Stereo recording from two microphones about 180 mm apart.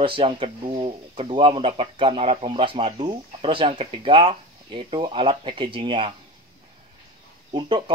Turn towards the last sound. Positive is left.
turn(degrees=-30)  # may be behind; listen again after turning